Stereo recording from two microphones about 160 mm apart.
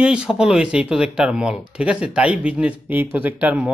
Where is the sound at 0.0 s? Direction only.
5° right (ahead or behind).